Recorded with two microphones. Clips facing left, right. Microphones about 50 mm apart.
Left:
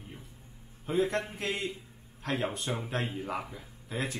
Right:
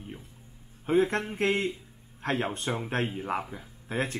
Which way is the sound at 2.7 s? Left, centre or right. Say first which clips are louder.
Right 4 dB; right.